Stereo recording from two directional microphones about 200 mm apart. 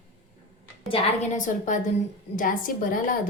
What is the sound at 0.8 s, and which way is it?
A woman's voice, 35° left (ahead or behind).